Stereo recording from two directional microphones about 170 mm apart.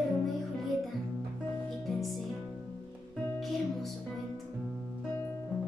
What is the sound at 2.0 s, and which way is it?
Music, centre (ahead or behind).